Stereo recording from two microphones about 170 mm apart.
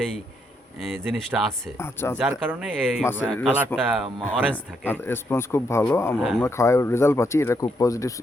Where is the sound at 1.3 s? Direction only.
5° right (ahead or behind).